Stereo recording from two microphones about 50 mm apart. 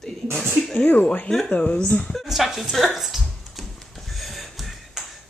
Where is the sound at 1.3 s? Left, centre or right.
Centre.